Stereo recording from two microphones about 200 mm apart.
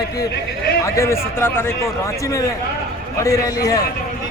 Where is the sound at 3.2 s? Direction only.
15° left (ahead or behind).